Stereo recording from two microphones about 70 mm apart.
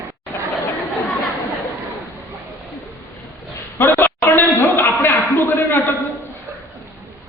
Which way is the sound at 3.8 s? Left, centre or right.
Left.